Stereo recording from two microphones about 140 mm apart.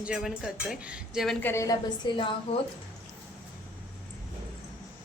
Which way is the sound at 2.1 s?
35° left (ahead or behind).